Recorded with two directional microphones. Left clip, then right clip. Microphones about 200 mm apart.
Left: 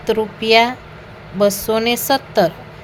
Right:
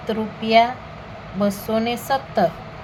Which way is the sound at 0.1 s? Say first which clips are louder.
Left 4 dB; 45° left (ahead or behind).